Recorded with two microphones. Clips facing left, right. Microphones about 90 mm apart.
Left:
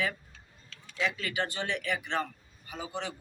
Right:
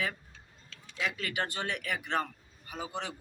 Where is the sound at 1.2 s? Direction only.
55° right (ahead or behind).